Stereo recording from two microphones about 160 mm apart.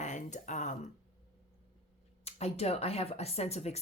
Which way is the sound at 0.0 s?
50° left (ahead or behind).